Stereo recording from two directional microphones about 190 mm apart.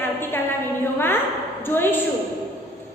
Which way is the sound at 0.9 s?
10° left (ahead or behind).